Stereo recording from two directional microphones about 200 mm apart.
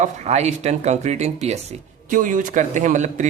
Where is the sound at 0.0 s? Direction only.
35° right (ahead or behind).